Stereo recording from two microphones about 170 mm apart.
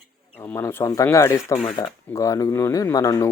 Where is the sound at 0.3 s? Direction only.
15° left (ahead or behind).